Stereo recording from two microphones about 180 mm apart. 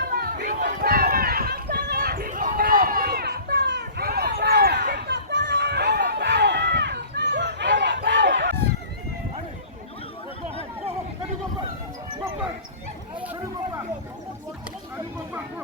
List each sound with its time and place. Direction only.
0.0 s run: 60° right (ahead or behind); by 8.5 s 85° right